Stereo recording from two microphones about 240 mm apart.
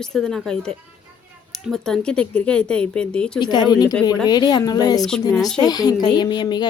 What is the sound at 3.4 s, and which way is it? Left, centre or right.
A woman's voice, centre.